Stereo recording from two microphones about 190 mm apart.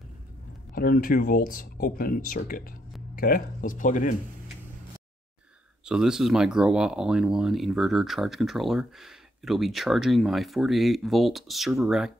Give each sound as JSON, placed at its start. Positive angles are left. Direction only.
{"t": 0.7, "sound": "speech", "side_deg": 45}
{"t": 5.9, "sound": "speech", "side_deg": -5}